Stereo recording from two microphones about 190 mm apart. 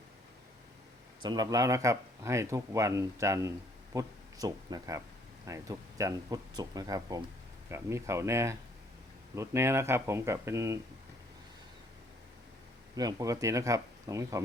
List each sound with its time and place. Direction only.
1.2 s speech: 20° right (ahead or behind)
13.0 s speech: 20° right (ahead or behind)